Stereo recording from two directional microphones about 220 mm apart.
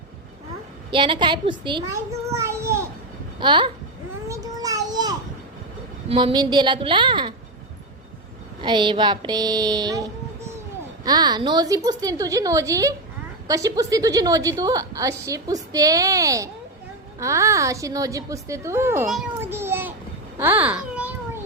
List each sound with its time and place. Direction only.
0.9 s a child's voice: 20° right (ahead or behind)
4.3 s a sound: 15° right (ahead or behind)
6.1 s a woman's voice: 25° right (ahead or behind)
8.6 s a woman's voice: 20° right (ahead or behind)
19.0 s a sound: 5° right (ahead or behind)
20.4 s a child's voice: 10° right (ahead or behind)